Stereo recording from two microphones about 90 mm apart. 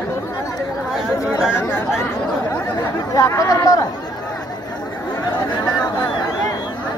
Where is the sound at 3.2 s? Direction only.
40° left (ahead or behind).